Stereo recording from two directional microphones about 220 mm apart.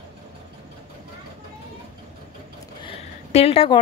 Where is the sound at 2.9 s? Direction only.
25° left (ahead or behind).